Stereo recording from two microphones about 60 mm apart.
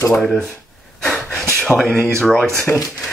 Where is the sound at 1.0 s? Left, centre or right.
Centre.